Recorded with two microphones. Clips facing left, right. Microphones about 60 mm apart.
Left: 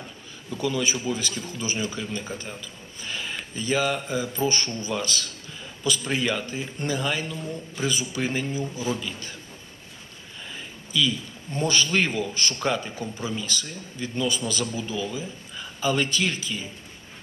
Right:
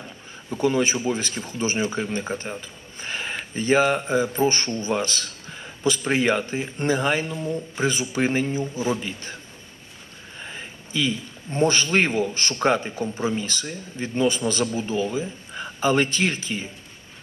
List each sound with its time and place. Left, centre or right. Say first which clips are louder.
0.5 s a man's voice: right 5 dB; right
9.0 s speech: right 2 dB; right
10.4 s a sound: right 2 dB; right
11.5 s speech: right 3 dB; right